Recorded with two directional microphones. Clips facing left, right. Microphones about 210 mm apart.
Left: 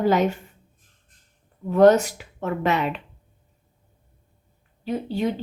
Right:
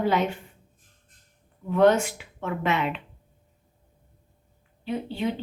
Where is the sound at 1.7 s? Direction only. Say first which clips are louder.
Left 4 dB; 40° left (ahead or behind).